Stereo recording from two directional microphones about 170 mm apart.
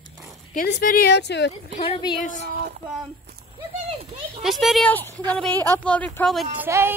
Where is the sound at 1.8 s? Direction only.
30° left (ahead or behind).